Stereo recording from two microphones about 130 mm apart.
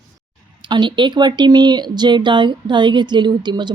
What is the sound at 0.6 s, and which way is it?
Speech, 35° right (ahead or behind).